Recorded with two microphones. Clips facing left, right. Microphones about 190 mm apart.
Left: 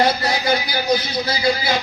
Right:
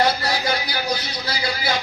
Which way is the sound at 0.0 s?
20° left (ahead or behind).